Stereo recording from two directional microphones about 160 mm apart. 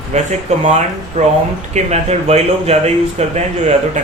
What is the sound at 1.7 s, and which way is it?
Speech, 45° right (ahead or behind).